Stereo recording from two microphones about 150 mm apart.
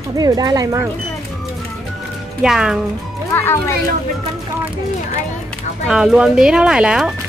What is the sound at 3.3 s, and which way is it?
Speech, 15° left (ahead or behind).